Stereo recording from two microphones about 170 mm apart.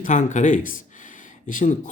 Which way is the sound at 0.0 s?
45° left (ahead or behind).